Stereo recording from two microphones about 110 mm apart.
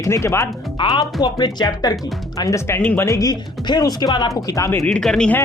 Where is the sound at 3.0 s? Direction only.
30° left (ahead or behind).